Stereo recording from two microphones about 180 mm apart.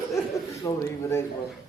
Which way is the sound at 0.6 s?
15° left (ahead or behind).